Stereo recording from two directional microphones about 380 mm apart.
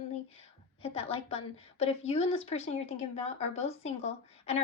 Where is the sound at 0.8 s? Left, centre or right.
Centre.